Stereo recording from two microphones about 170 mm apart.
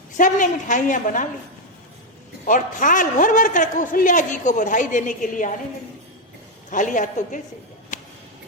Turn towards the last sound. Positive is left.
turn(degrees=50)  # may be behind; listen again after turning